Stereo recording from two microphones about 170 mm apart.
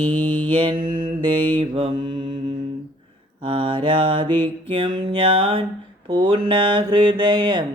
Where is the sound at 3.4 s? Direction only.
30° right (ahead or behind).